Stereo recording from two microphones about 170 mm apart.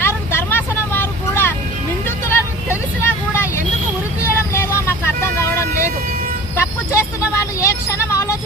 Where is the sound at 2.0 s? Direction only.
15° left (ahead or behind).